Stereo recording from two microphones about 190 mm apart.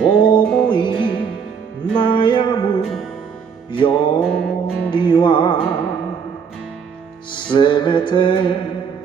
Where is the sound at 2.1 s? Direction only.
25° left (ahead or behind).